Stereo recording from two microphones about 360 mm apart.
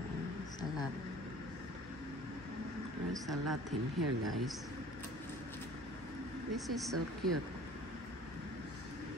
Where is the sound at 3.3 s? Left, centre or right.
Right.